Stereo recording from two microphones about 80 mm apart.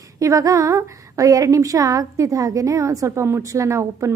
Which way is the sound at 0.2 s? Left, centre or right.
Right.